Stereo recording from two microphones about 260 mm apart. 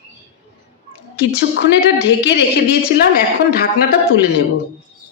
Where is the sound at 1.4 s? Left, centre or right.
Left.